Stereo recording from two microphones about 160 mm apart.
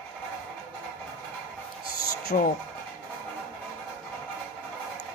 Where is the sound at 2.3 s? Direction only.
50° left (ahead or behind).